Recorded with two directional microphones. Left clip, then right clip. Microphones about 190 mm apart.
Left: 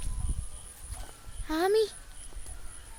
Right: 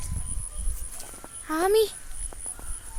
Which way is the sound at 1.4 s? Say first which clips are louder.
Right 3 dB; centre (ahead or behind).